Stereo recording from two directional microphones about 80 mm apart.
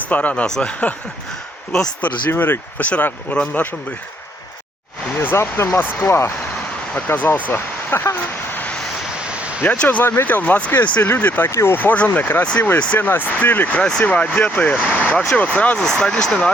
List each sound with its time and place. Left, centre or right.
0.1 s speech: centre
2.0 s speech: left
5.2 s speech: left
8.5 s vehicle: centre
9.2 s a sound: centre
9.6 s speech: centre
10.0 s speech: left